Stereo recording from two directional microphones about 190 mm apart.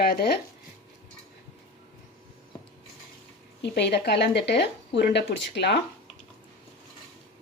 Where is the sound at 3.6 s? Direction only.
60° left (ahead or behind).